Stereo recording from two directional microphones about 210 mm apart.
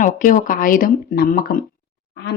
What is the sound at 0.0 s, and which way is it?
A woman's voice, 40° left (ahead or behind).